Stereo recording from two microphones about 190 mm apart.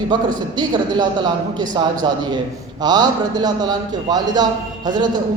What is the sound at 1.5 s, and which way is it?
A man's voice, 25° right (ahead or behind).